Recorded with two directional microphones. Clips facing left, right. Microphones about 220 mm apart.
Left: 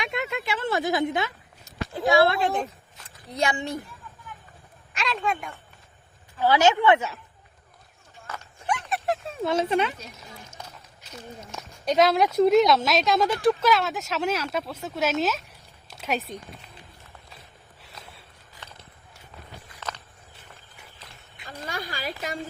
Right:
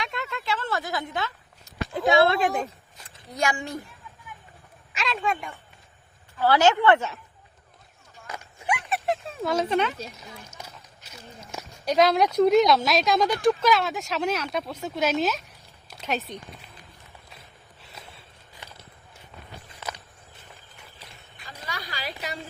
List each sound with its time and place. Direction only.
0.0 s speech: 15° left (ahead or behind)
2.0 s speech: 20° right (ahead or behind)
3.3 s a woman's voice: 20° left (ahead or behind)
4.9 s speech: centre (ahead or behind)
6.4 s speech: 15° left (ahead or behind)
8.3 s a sound: 10° right (ahead or behind)
9.4 s speech: 25° left (ahead or behind)
9.6 s speech: 5° left (ahead or behind)
11.9 s speech: centre (ahead or behind)
19.8 s walk: 10° right (ahead or behind)
21.7 s a sound: 50° left (ahead or behind)